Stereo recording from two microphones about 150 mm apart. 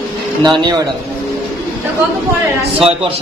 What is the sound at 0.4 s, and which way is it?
Speech, 30° right (ahead or behind).